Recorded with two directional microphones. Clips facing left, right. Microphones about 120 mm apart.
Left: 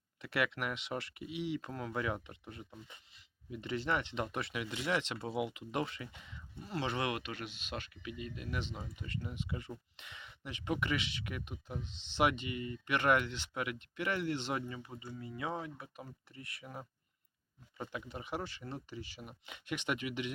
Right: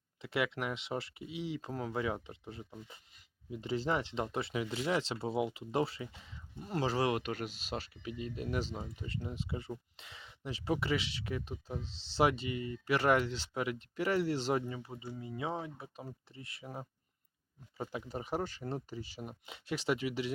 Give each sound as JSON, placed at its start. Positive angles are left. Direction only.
{"t": 0.2, "sound": "speech", "side_deg": -25}